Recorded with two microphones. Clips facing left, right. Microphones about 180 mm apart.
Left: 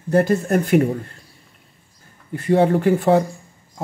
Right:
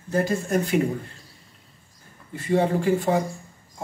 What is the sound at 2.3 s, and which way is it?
Speech, 60° left (ahead or behind).